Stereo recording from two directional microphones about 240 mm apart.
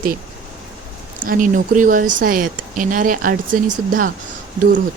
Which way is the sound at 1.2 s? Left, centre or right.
Right.